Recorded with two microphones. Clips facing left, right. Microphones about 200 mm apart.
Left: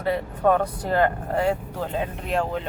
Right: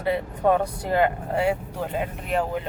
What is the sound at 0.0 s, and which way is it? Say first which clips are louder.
A woman's voice: left 1 dB; 15° right (ahead or behind).